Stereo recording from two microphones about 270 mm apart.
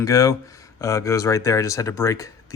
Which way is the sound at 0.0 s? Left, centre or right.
Centre.